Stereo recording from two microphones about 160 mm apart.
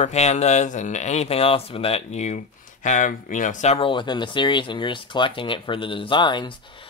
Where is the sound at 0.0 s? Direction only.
45° left (ahead or behind).